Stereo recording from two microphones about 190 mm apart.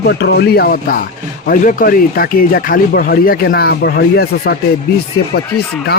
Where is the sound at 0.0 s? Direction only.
60° left (ahead or behind).